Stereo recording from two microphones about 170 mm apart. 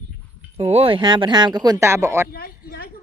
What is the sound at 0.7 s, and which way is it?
Speech, 35° right (ahead or behind).